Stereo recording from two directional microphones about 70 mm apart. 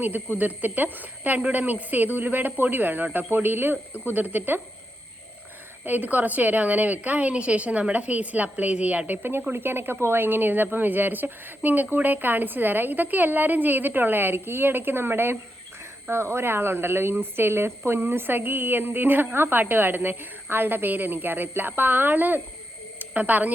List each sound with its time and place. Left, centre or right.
0.0 s a woman's voice: right
5.8 s a woman's voice: right
23.0 s a sound: right